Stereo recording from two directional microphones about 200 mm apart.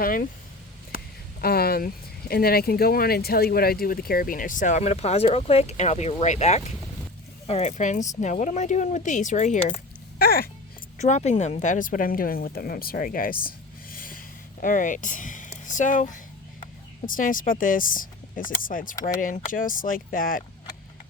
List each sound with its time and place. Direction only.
0.0 s speech: 45° left (ahead or behind)
10.2 s speech: 50° left (ahead or behind)
10.9 s speech: 35° left (ahead or behind)
13.9 s a sound: 45° left (ahead or behind)
17.2 s speech: 40° left (ahead or behind)